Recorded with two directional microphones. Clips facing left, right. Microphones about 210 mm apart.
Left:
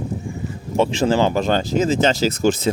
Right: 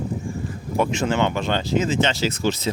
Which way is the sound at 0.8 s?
30° left (ahead or behind).